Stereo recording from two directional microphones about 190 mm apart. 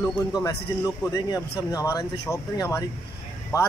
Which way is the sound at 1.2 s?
20° left (ahead or behind).